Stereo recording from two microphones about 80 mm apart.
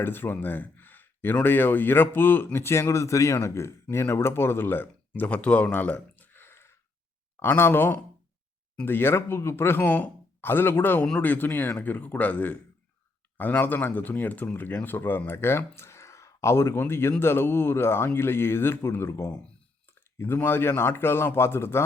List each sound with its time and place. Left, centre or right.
0.0 s speech: left